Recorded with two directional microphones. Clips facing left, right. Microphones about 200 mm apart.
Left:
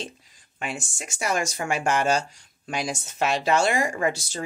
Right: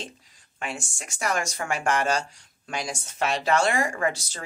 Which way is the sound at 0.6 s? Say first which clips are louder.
Left 2 dB; 15° left (ahead or behind).